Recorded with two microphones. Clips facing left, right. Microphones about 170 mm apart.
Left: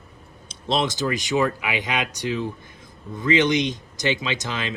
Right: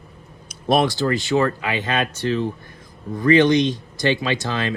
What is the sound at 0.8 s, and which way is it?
Speech, 20° left (ahead or behind).